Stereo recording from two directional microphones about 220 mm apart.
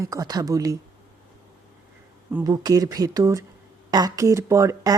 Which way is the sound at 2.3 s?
15° right (ahead or behind).